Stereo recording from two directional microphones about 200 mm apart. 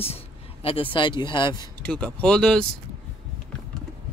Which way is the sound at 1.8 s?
5° left (ahead or behind).